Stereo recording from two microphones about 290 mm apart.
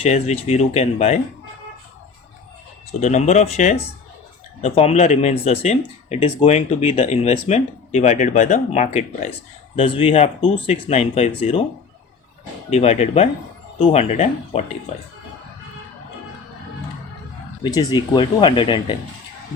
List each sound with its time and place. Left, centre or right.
0.0 s speech: left
3.0 s speech: left
12.7 s speech: left
17.6 s speech: centre